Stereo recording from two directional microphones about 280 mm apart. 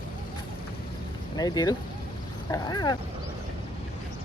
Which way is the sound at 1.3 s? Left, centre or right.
Centre.